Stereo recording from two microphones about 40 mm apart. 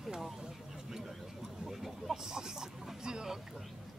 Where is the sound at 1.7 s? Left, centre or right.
Centre.